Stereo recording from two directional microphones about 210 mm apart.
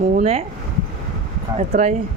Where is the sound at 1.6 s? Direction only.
30° right (ahead or behind).